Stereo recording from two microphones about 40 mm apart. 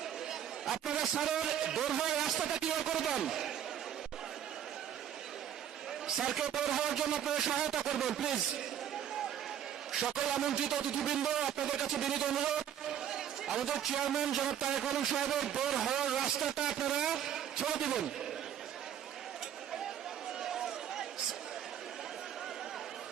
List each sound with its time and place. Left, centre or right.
0.3 s speech: centre
6.1 s a man's voice: centre
10.1 s speech: centre
16.0 s a sound: centre
16.6 s speech: centre
17.2 s vehicle: centre